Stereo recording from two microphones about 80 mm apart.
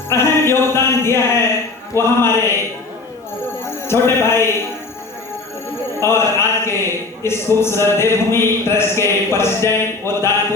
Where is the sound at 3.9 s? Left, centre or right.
Left.